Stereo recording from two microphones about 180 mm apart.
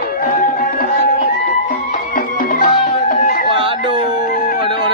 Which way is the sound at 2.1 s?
50° left (ahead or behind).